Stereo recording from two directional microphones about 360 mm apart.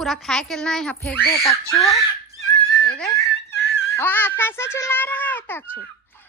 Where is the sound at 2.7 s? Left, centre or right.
Centre.